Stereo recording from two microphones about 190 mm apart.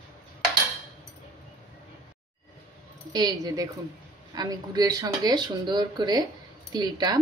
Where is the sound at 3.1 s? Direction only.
20° right (ahead or behind).